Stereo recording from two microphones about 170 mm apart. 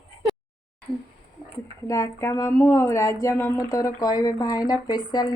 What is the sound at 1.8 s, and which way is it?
Speech, 20° left (ahead or behind).